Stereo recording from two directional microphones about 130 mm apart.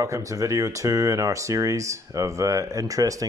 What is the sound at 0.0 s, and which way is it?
Speech, 25° right (ahead or behind).